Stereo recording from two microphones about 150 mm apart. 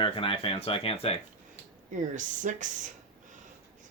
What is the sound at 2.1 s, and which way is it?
Speech, 55° right (ahead or behind).